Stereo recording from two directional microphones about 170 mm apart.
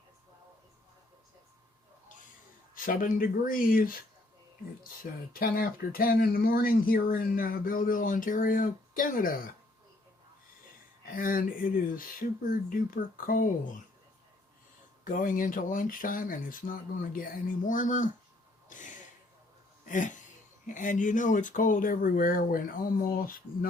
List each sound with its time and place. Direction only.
2.7 s speech: 55° left (ahead or behind)
5.3 s speech: 60° left (ahead or behind)
11.1 s speech: 55° left (ahead or behind)
15.0 s speech: 50° left (ahead or behind)
18.7 s gasp: 50° left (ahead or behind)
19.8 s a sound: 50° left (ahead or behind)
20.7 s speech: 50° left (ahead or behind)